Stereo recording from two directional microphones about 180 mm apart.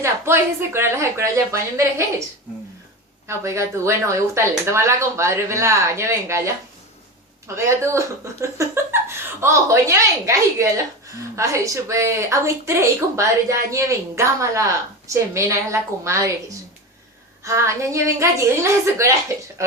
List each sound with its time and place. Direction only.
0.0 s speech: 15° right (ahead or behind)
3.2 s speech: 15° right (ahead or behind)
7.4 s speech: 15° right (ahead or behind)
17.4 s speech: 15° right (ahead or behind)